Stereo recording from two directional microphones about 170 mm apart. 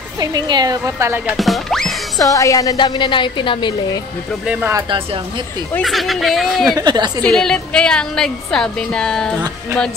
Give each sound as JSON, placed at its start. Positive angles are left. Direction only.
{"t": 0.2, "sound": "a woman's voice", "side_deg": -25}
{"t": 1.3, "sound": "speech", "side_deg": 0}
{"t": 2.1, "sound": "a woman's voice", "side_deg": 20}
{"t": 4.5, "sound": "speech", "side_deg": -5}
{"t": 4.7, "sound": "a woman's voice", "side_deg": -30}
{"t": 5.8, "sound": "speech", "side_deg": 0}
{"t": 6.7, "sound": "a woman's voice", "side_deg": -25}
{"t": 7.2, "sound": "speech", "side_deg": 5}